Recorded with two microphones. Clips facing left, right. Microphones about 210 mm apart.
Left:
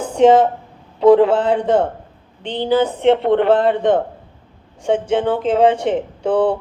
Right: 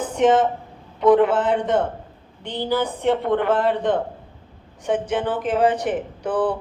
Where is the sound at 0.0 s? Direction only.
30° left (ahead or behind).